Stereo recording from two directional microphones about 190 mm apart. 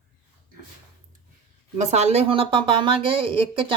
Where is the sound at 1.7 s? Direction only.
35° right (ahead or behind).